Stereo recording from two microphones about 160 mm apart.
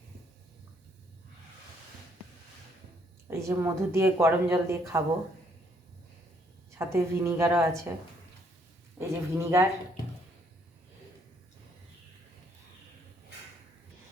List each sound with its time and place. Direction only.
3.2 s speech: 15° right (ahead or behind)
6.7 s speech: 15° right (ahead or behind)
9.0 s speech: 15° right (ahead or behind)